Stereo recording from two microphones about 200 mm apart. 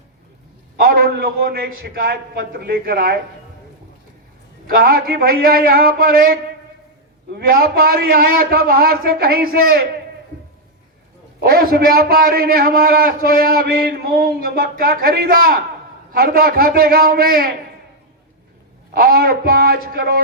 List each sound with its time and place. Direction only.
0.8 s a man's voice: 50° right (ahead or behind)
4.7 s a man's voice: 50° right (ahead or behind)
11.3 s a man's voice: 50° right (ahead or behind)
18.9 s a man's voice: 50° right (ahead or behind)